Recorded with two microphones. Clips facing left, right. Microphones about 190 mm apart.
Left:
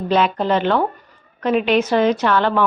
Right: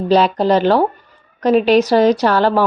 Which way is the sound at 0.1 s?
35° right (ahead or behind).